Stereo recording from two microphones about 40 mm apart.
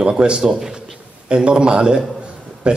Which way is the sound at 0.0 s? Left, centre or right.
Right.